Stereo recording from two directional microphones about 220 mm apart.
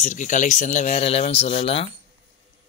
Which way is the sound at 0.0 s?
35° left (ahead or behind).